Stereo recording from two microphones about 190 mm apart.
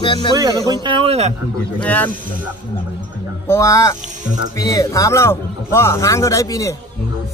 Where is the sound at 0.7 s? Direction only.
25° right (ahead or behind).